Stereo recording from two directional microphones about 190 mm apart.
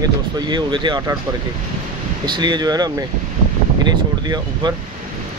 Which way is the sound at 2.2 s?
25° right (ahead or behind).